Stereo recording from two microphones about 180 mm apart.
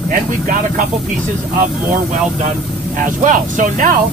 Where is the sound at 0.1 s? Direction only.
50° right (ahead or behind).